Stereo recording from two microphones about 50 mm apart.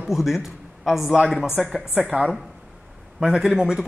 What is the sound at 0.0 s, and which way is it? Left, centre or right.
A man's voice, centre.